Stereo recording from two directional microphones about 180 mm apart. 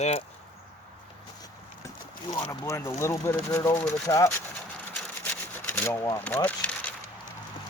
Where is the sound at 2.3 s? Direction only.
20° left (ahead or behind).